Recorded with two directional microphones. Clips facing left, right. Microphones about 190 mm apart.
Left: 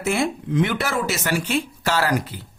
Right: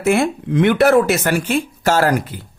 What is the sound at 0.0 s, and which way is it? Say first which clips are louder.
Speech: right 6 dB; 60° right (ahead or behind).